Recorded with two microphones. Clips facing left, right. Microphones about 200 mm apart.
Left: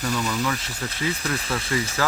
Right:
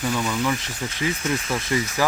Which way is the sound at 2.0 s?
15° right (ahead or behind).